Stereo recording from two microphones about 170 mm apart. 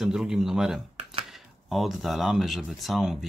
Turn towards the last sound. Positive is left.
turn(degrees=0)  # may be behind; listen again after turning